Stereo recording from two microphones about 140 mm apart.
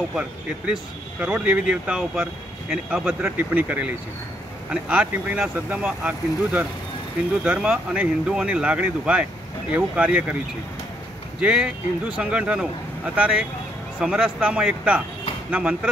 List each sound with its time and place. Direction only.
0.1 s speech: 5° right (ahead or behind)
11.3 s speech: 5° right (ahead or behind)